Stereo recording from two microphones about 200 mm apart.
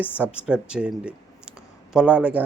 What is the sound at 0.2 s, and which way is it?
Speech, 5° right (ahead or behind).